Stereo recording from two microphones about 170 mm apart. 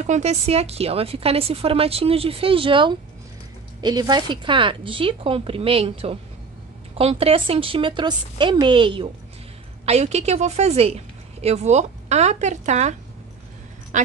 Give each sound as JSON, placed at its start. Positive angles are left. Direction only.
{"t": 0.0, "sound": "a woman's voice", "side_deg": -40}
{"t": 13.9, "sound": "speech", "side_deg": -45}